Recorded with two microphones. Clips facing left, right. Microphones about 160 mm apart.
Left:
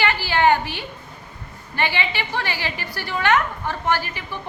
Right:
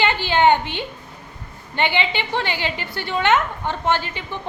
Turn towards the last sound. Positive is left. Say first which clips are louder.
# right 1 dB
turn(degrees=-20)  # may be behind; listen again after turning